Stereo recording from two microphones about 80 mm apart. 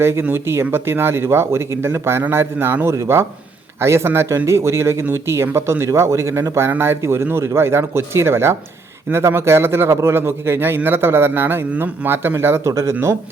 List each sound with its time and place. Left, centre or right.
0.0 s a man's voice: right